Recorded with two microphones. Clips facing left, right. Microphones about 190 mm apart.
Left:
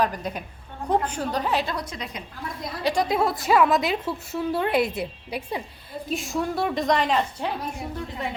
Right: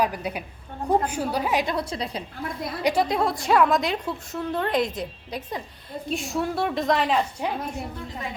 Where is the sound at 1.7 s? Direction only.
30° right (ahead or behind).